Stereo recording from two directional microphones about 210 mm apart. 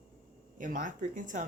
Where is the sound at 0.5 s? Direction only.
40° right (ahead or behind).